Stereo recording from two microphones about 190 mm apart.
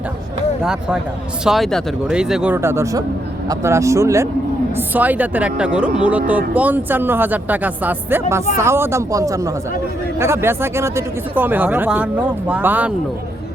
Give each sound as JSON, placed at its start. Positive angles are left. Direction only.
{"t": 0.6, "sound": "speech", "side_deg": -5}